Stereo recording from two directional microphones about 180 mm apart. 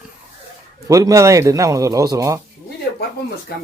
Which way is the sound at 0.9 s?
20° right (ahead or behind).